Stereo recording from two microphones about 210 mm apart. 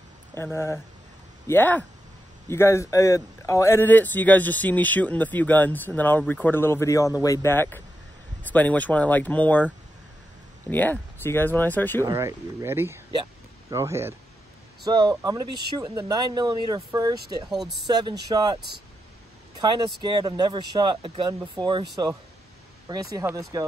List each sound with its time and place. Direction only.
0.4 s speech: 10° left (ahead or behind)
12.0 s speech: 15° right (ahead or behind)
17.5 s speech: centre (ahead or behind)
17.8 s speech: 20° right (ahead or behind)
19.6 s speech: 20° right (ahead or behind)
22.8 s speech: 15° right (ahead or behind)